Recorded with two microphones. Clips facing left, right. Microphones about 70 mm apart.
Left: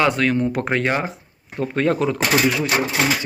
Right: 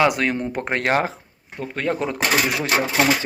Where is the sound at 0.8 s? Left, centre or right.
Right.